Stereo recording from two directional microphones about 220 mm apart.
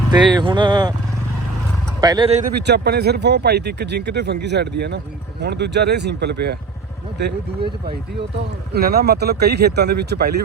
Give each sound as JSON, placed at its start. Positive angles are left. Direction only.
{"t": 0.1, "sound": "speech", "side_deg": -20}
{"t": 2.0, "sound": "speech", "side_deg": -20}
{"t": 2.6, "sound": "speech", "side_deg": -50}
{"t": 8.7, "sound": "speech", "side_deg": -45}